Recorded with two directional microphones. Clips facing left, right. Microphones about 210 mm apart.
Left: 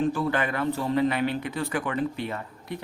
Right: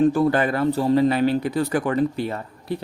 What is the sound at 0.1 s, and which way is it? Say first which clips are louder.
Speech: right 7 dB; 40° right (ahead or behind).